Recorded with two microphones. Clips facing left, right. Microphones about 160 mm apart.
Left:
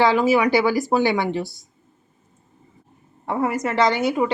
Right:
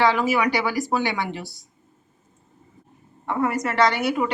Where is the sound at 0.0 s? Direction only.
25° left (ahead or behind).